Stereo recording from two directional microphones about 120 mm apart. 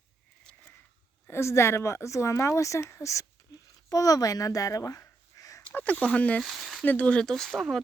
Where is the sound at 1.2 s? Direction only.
25° left (ahead or behind).